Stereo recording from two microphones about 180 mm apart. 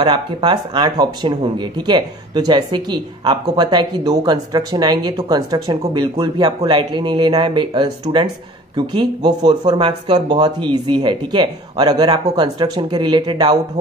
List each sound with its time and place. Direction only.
0.0 s speech: 25° right (ahead or behind)